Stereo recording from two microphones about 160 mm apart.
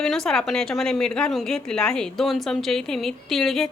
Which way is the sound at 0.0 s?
5° left (ahead or behind).